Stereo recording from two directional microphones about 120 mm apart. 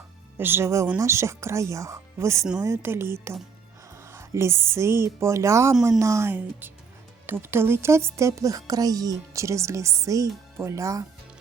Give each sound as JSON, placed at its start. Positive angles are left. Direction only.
{"t": 0.3, "sound": "speech", "side_deg": -20}